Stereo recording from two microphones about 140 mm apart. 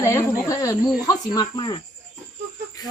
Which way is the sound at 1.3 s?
35° left (ahead or behind).